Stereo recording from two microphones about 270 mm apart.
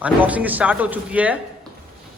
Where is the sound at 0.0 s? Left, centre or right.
Centre.